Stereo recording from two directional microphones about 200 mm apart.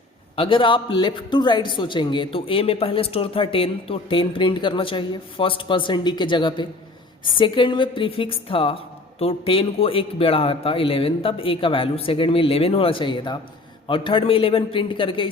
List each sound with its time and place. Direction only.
0.3 s a woman's voice: 25° left (ahead or behind)